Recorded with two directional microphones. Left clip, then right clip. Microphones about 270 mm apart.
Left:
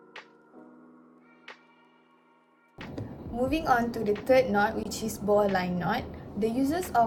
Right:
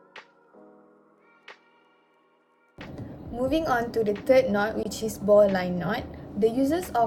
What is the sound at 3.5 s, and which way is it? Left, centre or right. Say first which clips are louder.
A woman's voice: right 1 dB; centre.